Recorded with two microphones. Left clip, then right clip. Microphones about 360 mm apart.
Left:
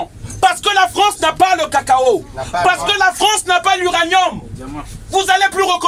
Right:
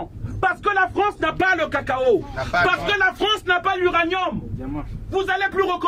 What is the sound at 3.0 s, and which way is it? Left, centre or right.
Speech, left.